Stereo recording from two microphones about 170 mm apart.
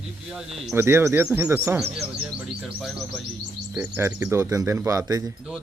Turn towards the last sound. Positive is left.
turn(degrees=-20)  # may be behind; listen again after turning